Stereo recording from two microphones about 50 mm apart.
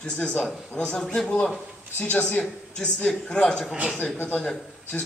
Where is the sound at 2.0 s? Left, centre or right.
Left.